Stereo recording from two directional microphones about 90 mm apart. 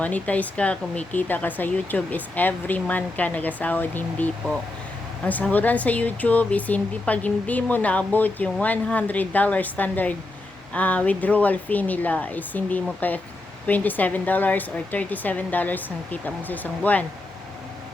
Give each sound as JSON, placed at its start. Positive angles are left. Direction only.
{"t": 0.0, "sound": "speech", "side_deg": 15}